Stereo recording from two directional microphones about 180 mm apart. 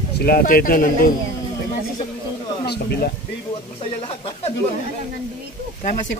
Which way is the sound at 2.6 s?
60° left (ahead or behind).